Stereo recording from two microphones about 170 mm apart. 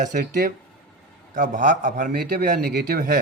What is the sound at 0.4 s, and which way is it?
A man's voice, 50° right (ahead or behind).